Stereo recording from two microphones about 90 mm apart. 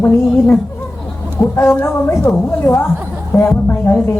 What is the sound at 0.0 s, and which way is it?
A man's voice, 15° left (ahead or behind).